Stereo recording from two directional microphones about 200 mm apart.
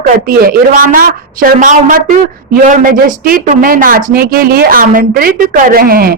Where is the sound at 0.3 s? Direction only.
45° right (ahead or behind).